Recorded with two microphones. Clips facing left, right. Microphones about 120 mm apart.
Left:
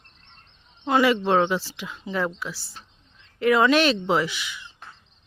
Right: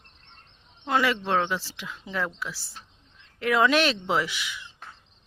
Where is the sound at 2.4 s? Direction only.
5° right (ahead or behind).